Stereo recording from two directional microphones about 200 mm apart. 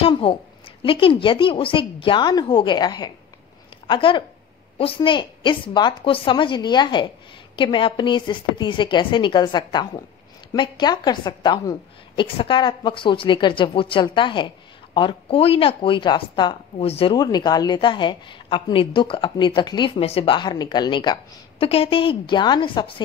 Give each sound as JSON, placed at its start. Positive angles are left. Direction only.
{"t": 0.0, "sound": "a woman's voice", "side_deg": 25}